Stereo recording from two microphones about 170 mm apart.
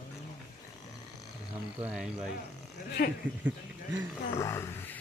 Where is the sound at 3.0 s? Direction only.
70° left (ahead or behind).